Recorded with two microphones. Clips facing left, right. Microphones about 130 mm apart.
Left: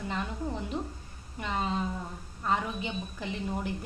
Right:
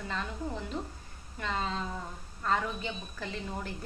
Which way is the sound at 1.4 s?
15° left (ahead or behind).